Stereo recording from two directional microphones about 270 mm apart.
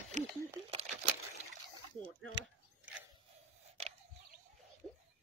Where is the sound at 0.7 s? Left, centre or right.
Right.